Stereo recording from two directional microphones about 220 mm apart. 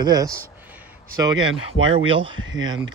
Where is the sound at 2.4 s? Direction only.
60° right (ahead or behind).